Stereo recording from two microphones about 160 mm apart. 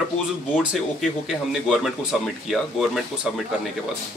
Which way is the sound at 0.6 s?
5° right (ahead or behind).